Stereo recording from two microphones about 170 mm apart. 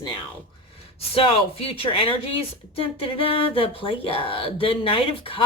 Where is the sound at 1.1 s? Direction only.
35° left (ahead or behind).